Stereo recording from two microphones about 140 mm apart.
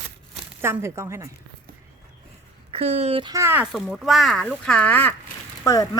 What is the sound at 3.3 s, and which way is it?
Speech, 15° right (ahead or behind).